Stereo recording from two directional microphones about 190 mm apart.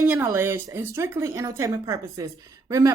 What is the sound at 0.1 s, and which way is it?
Speech, 15° right (ahead or behind).